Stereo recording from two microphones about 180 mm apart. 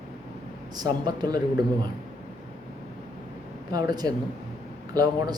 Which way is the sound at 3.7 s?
20° right (ahead or behind).